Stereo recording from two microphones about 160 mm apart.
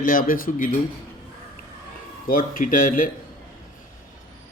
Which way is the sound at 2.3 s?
60° left (ahead or behind).